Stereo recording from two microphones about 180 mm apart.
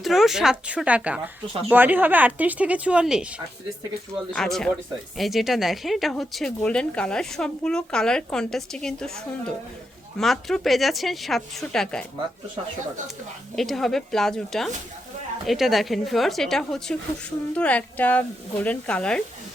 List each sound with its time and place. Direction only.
0.0 s a woman's voice: centre (ahead or behind)
13.6 s speech: centre (ahead or behind)